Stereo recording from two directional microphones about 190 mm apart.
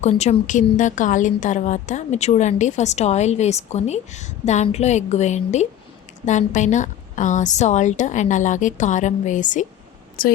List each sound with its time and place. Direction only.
0.0 s a woman's voice: 35° left (ahead or behind)